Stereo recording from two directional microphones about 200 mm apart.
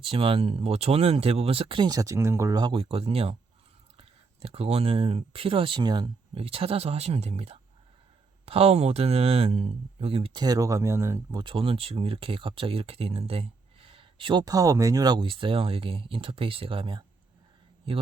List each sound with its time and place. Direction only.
0.0 s speech: 25° right (ahead or behind)